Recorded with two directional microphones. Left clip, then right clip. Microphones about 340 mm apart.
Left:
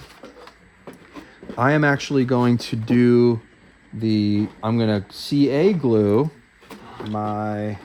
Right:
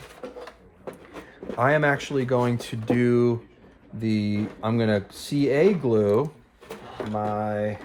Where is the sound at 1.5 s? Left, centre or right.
Left.